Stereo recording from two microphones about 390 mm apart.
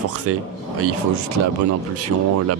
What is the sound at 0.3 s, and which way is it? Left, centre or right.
Speech, right.